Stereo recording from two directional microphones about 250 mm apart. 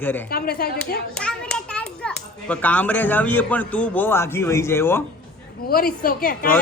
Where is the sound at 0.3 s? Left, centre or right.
Left.